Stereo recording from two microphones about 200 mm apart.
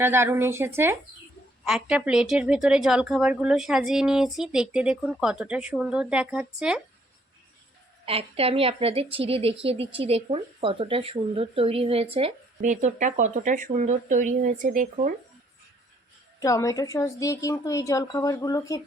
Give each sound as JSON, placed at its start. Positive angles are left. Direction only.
{"t": 0.0, "sound": "speech", "side_deg": -10}
{"t": 8.0, "sound": "a woman's voice", "side_deg": -30}
{"t": 16.4, "sound": "a woman's voice", "side_deg": 15}